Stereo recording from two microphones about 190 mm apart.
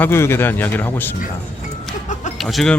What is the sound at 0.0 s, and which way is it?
Speech, 15° left (ahead or behind).